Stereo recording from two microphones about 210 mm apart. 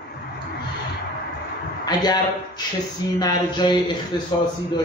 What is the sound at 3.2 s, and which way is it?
A man's voice, 20° left (ahead or behind).